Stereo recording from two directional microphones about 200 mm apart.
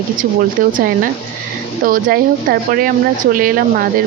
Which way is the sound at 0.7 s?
45° right (ahead or behind).